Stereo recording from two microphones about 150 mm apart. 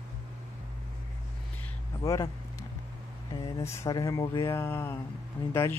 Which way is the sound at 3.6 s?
25° left (ahead or behind).